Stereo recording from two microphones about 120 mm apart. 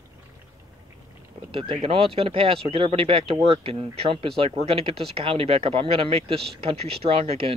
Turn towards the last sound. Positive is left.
turn(degrees=-55)  # may be behind; listen again after turning